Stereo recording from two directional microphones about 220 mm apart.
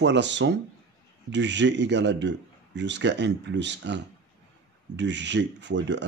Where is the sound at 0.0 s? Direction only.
55° right (ahead or behind).